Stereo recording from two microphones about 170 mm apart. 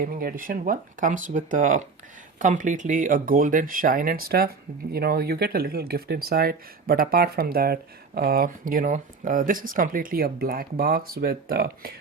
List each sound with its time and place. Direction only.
0.0 s speech: 55° right (ahead or behind)